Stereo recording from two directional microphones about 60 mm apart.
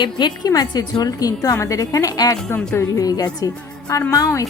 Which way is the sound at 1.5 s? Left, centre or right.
Left.